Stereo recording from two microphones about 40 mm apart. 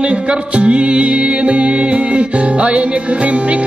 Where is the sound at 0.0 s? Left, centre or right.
Right.